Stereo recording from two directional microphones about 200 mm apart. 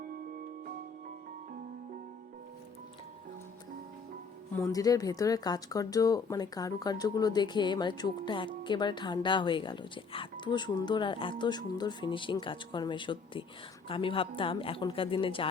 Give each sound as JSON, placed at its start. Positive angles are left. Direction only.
{"t": 4.5, "sound": "speech", "side_deg": 15}